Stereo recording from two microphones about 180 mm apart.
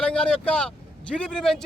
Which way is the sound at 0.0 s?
5° left (ahead or behind).